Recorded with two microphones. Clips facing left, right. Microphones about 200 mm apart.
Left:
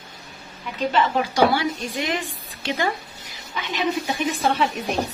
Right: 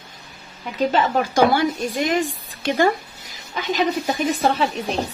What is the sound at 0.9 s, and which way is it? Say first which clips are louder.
A woman's voice: right 1 dB; 45° right (ahead or behind).